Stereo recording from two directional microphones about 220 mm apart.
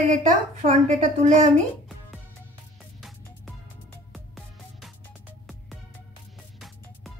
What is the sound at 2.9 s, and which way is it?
Music, centre (ahead or behind).